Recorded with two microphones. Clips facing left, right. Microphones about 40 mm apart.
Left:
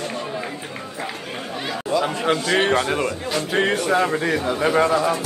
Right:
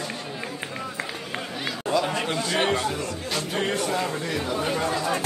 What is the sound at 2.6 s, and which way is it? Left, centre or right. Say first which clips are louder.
Speech: left 5 dB; left.